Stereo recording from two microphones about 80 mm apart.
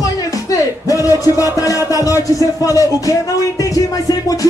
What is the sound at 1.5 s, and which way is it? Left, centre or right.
Music, left.